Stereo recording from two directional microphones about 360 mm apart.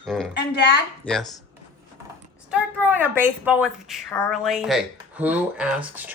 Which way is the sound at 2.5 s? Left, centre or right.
Centre.